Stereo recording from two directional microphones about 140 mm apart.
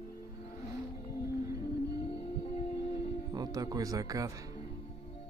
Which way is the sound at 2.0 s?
40° left (ahead or behind).